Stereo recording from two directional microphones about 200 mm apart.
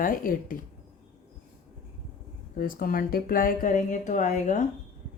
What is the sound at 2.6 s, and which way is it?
Speech, 45° left (ahead or behind).